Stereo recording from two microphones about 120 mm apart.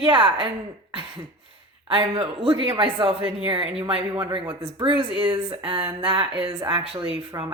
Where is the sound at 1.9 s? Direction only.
50° right (ahead or behind).